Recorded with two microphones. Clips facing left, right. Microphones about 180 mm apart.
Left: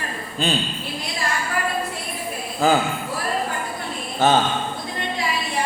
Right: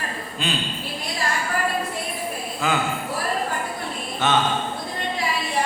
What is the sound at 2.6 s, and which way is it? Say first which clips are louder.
Speech: left 6 dB; 35° left (ahead or behind).